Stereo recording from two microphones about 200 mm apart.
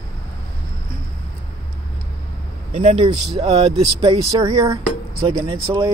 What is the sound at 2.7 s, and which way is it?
Speech, 30° right (ahead or behind).